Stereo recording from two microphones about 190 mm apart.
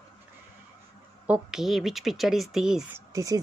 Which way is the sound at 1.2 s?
5° right (ahead or behind).